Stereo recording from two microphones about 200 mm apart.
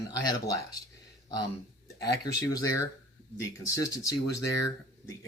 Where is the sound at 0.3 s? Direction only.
20° left (ahead or behind).